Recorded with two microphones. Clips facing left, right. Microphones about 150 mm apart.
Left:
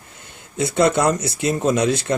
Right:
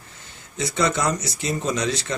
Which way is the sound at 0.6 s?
55° left (ahead or behind).